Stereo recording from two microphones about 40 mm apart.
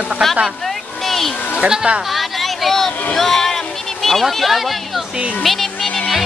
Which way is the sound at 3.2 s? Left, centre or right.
Centre.